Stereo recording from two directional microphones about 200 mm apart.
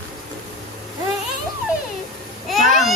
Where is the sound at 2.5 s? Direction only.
Centre (ahead or behind).